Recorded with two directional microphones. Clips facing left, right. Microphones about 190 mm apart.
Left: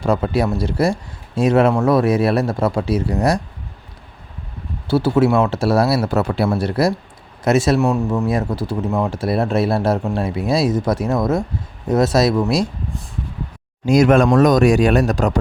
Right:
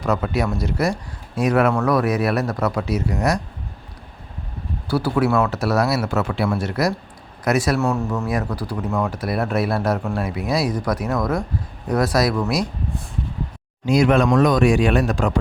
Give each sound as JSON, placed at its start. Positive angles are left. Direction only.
{"t": 0.0, "sound": "speech", "side_deg": 30}
{"t": 4.9, "sound": "speech", "side_deg": 25}
{"t": 13.8, "sound": "speech", "side_deg": 45}